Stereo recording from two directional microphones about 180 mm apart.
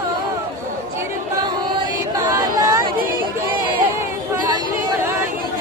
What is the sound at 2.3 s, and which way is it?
Chatter, 20° right (ahead or behind).